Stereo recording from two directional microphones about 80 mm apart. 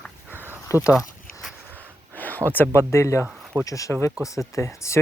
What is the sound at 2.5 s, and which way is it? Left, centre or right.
Speech, left.